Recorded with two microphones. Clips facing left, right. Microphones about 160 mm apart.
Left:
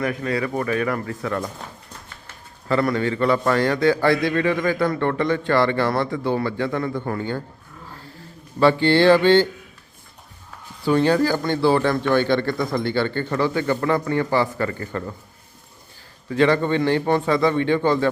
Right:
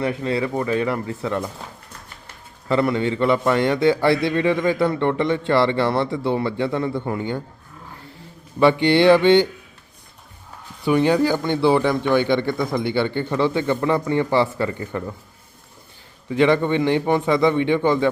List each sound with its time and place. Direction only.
0.0 s a man's voice: 25° right (ahead or behind)
2.6 s a man's voice: 20° right (ahead or behind)
8.5 s a man's voice: 20° right (ahead or behind)
10.8 s a man's voice: 15° right (ahead or behind)
16.3 s a man's voice: 20° right (ahead or behind)